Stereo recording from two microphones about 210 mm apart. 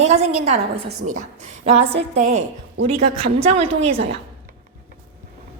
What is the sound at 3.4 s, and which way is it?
Speech, 30° right (ahead or behind).